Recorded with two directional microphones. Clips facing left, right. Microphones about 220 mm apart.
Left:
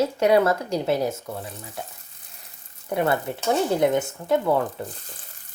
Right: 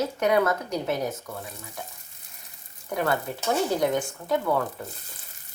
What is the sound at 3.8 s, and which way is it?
Speech, 25° left (ahead or behind).